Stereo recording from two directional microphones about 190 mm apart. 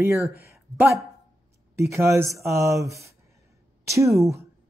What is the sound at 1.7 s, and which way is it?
Speech, 15° right (ahead or behind).